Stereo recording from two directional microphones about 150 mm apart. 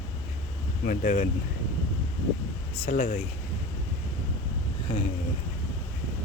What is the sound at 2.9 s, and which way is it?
Speech, 70° left (ahead or behind).